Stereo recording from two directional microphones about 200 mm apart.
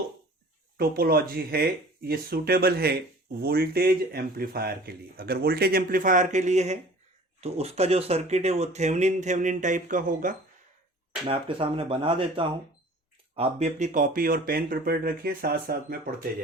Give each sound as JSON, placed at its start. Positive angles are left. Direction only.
{"t": 0.8, "sound": "speech", "side_deg": -50}
{"t": 11.3, "sound": "speech", "side_deg": -25}